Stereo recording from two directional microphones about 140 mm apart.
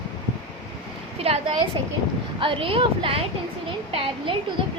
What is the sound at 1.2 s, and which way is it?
A woman's voice, 45° right (ahead or behind).